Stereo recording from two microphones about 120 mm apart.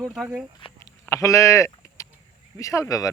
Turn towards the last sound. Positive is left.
turn(degrees=30)  # may be behind; listen again after turning